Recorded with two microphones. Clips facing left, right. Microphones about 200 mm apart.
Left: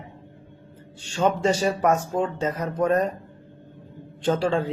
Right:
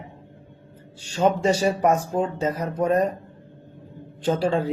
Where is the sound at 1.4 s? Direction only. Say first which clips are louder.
Right 1 dB; 10° right (ahead or behind).